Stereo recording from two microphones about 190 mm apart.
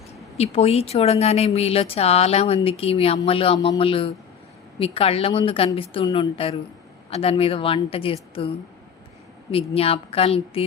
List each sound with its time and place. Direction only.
0.3 s a woman's voice: 35° left (ahead or behind)